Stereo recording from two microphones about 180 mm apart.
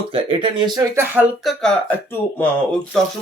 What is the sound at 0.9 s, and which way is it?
Speech, 10° right (ahead or behind).